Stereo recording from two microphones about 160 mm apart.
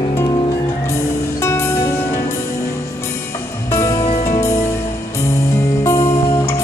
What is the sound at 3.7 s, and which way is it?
Music, 20° left (ahead or behind).